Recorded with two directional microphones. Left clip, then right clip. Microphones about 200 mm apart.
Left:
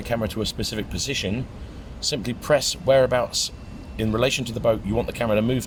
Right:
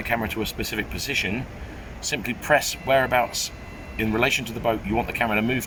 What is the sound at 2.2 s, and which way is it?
Speech, 60° left (ahead or behind).